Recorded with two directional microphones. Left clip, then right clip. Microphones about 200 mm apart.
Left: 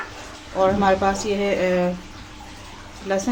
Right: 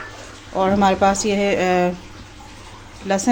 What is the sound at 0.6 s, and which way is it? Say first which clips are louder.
A woman's voice: right 2 dB; 40° right (ahead or behind).